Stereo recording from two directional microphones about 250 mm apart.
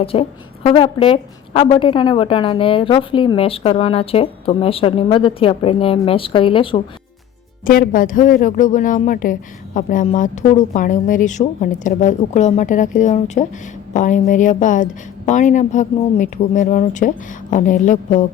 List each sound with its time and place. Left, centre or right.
0.0 s a woman's voice: left
7.6 s a woman's voice: left